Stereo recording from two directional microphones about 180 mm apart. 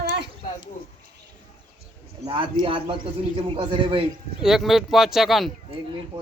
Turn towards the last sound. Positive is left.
turn(degrees=0)  # may be behind; listen again after turning